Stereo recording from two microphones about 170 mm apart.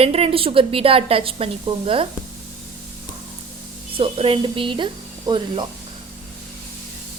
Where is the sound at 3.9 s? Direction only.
35° right (ahead or behind).